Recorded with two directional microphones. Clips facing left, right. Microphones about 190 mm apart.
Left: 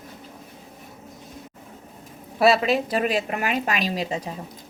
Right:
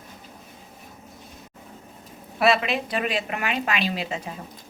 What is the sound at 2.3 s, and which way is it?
A woman's voice, 35° left (ahead or behind).